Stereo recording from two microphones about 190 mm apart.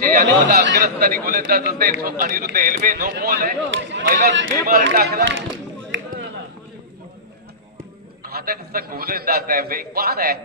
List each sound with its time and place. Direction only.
0.0 s a man's voice: 50° right (ahead or behind); by 4.1 s 70° right (ahead or behind)
4.6 s speech: 50° right (ahead or behind)
8.2 s a man's voice: 55° right (ahead or behind)